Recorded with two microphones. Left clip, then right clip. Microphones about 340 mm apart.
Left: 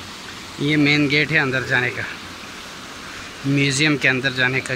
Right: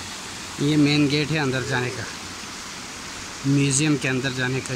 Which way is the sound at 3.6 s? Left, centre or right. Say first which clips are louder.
Left 7 dB; centre.